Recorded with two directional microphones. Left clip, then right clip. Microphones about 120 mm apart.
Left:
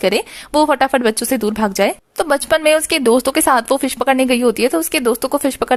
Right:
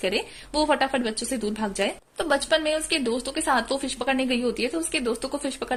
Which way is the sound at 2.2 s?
60° left (ahead or behind).